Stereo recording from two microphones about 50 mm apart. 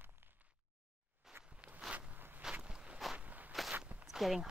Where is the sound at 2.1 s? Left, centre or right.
Right.